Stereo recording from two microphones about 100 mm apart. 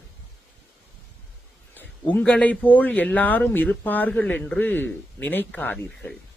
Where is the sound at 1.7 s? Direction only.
20° left (ahead or behind).